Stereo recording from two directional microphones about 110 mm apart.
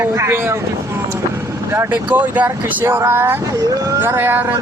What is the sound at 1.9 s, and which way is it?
Speech, 15° right (ahead or behind).